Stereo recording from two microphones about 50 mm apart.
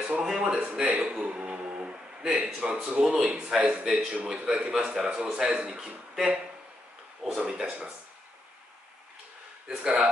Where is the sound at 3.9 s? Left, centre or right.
Centre.